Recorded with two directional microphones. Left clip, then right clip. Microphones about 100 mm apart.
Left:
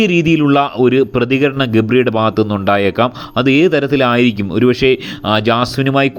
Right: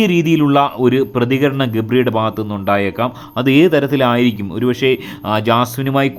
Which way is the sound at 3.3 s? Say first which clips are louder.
Even; 15° left (ahead or behind).